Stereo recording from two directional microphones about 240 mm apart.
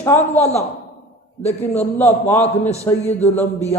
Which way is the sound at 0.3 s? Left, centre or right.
Left.